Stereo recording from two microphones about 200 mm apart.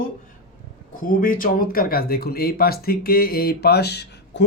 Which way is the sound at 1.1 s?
45° left (ahead or behind).